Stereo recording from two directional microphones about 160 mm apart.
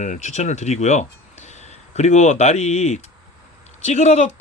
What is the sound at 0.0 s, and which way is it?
Speech, 50° left (ahead or behind).